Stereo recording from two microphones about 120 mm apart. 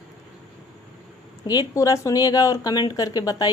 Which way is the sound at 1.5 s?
30° left (ahead or behind).